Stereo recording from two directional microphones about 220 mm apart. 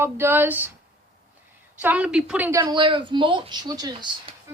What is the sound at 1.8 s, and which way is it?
Speech, 5° right (ahead or behind).